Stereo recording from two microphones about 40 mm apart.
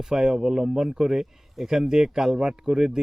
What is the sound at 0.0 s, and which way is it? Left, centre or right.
Speech, centre.